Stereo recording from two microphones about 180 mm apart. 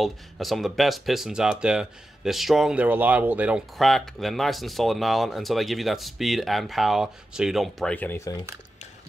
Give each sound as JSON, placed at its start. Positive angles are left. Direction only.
{"t": 0.0, "sound": "speech", "side_deg": 0}